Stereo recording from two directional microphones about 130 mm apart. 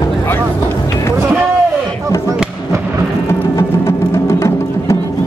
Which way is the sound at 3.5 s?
20° left (ahead or behind).